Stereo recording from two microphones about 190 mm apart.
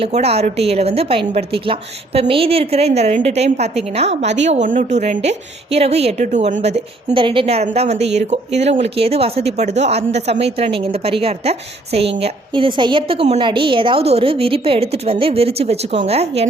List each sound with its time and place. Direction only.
0.0 s a woman's voice: 35° right (ahead or behind)